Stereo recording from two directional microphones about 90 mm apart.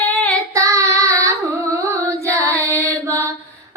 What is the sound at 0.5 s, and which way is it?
Child singing, 35° right (ahead or behind).